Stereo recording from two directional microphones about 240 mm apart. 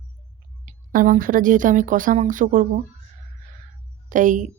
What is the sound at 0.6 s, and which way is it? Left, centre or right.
Speech, right.